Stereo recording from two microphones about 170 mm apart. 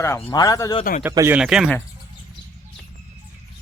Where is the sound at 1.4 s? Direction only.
5° right (ahead or behind).